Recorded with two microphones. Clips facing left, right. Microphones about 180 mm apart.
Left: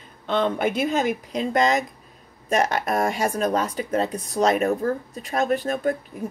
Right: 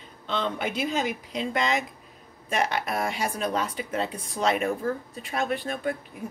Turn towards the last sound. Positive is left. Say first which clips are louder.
# left 6 dB
turn(degrees=45)  # may be behind; listen again after turning